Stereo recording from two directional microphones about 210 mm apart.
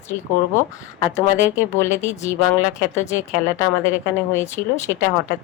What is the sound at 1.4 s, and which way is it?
Speech, 10° right (ahead or behind).